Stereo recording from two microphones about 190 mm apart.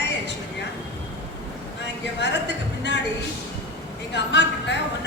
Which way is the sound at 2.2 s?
65° left (ahead or behind).